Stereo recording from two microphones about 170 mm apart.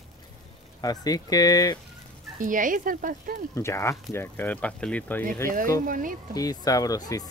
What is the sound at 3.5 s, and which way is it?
Speech, 15° left (ahead or behind).